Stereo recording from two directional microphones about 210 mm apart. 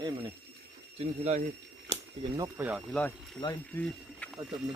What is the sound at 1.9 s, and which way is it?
Speech, 20° right (ahead or behind).